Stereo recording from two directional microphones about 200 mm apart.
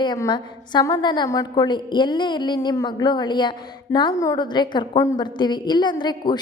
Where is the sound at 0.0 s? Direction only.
20° left (ahead or behind).